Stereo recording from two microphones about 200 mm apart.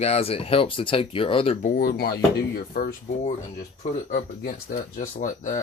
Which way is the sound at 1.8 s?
50° left (ahead or behind).